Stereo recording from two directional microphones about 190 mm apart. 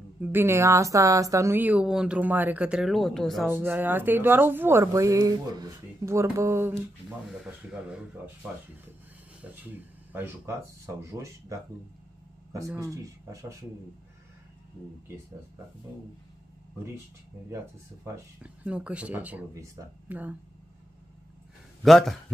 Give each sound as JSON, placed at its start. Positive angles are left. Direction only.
{"t": 0.2, "sound": "a woman's voice", "side_deg": -10}
{"t": 3.4, "sound": "a woman's voice", "side_deg": -10}
{"t": 9.4, "sound": "a woman's voice", "side_deg": -10}
{"t": 18.0, "sound": "a woman's voice", "side_deg": -10}
{"t": 21.8, "sound": "a man's voice", "side_deg": 0}